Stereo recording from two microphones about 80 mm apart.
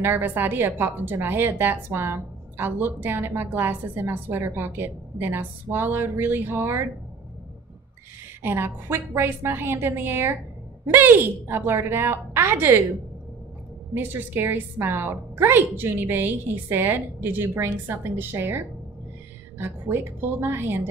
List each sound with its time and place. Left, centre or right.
0.0 s speech: right
8.4 s speech: right
13.9 s speech: right
19.6 s speech: right